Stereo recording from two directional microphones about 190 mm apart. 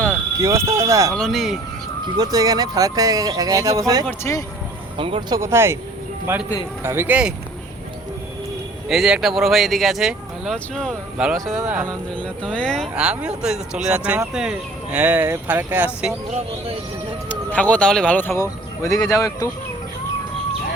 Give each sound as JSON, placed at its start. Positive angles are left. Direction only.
{"t": 0.3, "sound": "speech", "side_deg": -15}
{"t": 1.1, "sound": "speech", "side_deg": 0}
{"t": 2.1, "sound": "speech", "side_deg": -20}
{"t": 4.2, "sound": "speech", "side_deg": 15}
{"t": 4.9, "sound": "speech", "side_deg": -25}
{"t": 5.4, "sound": "speech", "side_deg": -15}
{"t": 8.9, "sound": "speech", "side_deg": -5}
{"t": 11.5, "sound": "speech", "side_deg": -15}
{"t": 11.9, "sound": "speech", "side_deg": 5}
{"t": 17.2, "sound": "speech", "side_deg": 5}